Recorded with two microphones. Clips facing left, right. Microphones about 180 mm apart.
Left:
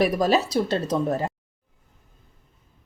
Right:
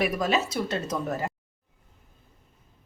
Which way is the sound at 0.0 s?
35° left (ahead or behind).